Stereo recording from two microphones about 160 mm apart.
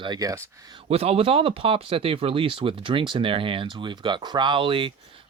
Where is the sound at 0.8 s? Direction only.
40° right (ahead or behind).